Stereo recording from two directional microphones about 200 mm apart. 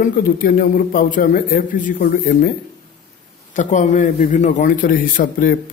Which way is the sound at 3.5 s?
40° left (ahead or behind).